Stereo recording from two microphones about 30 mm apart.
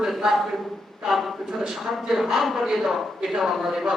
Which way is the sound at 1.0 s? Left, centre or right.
Centre.